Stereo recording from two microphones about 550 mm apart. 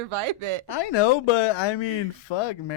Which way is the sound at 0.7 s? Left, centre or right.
Left.